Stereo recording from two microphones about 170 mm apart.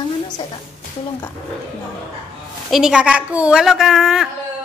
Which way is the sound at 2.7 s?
5° right (ahead or behind).